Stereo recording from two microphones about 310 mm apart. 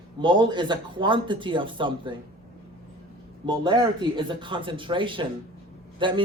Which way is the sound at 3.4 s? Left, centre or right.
Centre.